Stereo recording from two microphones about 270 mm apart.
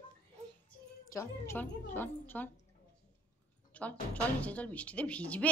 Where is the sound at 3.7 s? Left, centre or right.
Centre.